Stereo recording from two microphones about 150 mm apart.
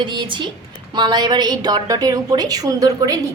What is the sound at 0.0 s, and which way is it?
A woman's voice, 30° right (ahead or behind).